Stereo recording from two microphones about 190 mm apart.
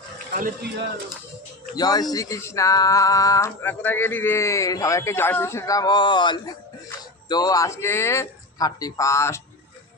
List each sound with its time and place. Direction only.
1.7 s speech: 20° left (ahead or behind)